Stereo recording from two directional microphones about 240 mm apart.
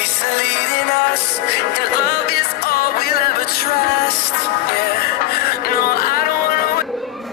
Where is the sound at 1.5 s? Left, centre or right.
Left.